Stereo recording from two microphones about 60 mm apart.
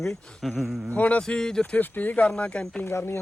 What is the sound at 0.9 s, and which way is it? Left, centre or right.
Speech, left.